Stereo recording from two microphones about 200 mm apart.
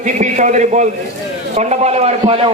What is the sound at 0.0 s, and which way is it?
A man's voice, 35° right (ahead or behind).